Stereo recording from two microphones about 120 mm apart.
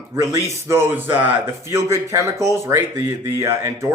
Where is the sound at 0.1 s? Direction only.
20° right (ahead or behind).